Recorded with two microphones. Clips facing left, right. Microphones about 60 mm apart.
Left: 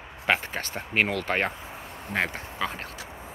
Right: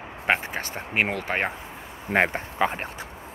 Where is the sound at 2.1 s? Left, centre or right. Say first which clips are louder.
Right 6 dB; right.